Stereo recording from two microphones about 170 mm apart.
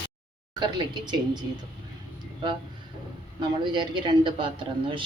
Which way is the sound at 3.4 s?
25° right (ahead or behind).